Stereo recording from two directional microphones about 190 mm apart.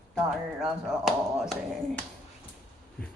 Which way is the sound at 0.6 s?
Centre (ahead or behind).